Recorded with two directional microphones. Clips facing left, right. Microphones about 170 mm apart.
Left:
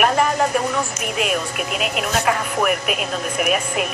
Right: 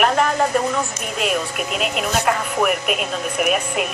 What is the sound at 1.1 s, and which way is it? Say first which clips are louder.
Speech: right 1 dB; centre (ahead or behind).